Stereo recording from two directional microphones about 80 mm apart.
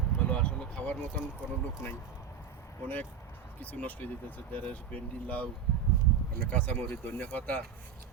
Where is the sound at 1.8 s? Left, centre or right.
Left.